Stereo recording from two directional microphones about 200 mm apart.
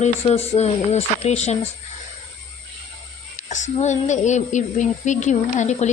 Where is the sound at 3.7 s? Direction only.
35° left (ahead or behind).